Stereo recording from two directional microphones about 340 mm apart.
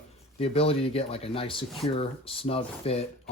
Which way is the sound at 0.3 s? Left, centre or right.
Centre.